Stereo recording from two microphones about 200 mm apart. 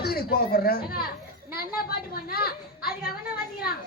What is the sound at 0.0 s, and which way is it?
A man's voice, 50° left (ahead or behind).